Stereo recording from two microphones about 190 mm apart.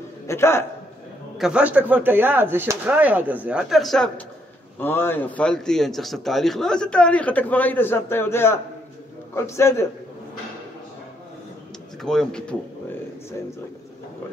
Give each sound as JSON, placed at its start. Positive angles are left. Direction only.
{"t": 0.3, "sound": "speech", "side_deg": 15}
{"t": 1.4, "sound": "speech", "side_deg": -5}
{"t": 12.0, "sound": "speech", "side_deg": 5}